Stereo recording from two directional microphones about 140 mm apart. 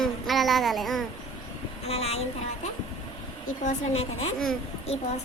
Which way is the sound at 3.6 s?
50° left (ahead or behind).